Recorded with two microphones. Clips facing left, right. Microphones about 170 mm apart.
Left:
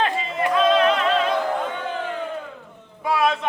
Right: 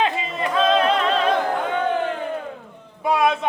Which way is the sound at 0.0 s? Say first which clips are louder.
Even; 25° right (ahead or behind).